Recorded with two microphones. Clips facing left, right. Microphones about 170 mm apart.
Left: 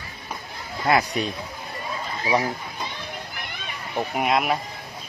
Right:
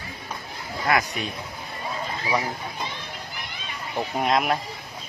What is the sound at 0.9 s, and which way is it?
Speech, 35° left (ahead or behind).